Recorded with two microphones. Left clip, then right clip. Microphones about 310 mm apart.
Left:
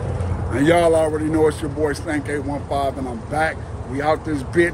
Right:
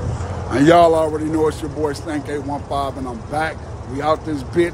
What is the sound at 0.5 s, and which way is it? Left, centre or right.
Speech, centre.